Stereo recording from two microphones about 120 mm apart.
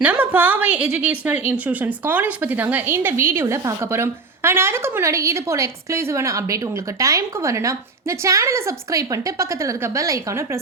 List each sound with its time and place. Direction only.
0.0 s a woman's voice: 15° right (ahead or behind)